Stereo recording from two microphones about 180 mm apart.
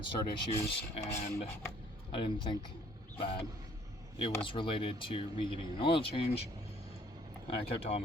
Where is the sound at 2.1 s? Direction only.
25° left (ahead or behind).